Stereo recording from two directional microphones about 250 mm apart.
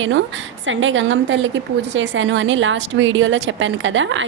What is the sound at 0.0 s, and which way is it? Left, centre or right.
A woman's voice, right.